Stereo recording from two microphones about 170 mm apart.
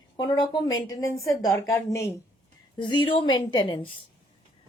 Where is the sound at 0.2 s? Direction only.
25° left (ahead or behind).